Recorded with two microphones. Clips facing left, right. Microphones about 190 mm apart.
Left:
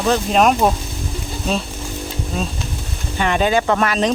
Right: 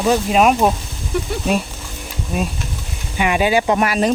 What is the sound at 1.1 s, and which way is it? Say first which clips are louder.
Speech: right 9 dB; 65° right (ahead or behind).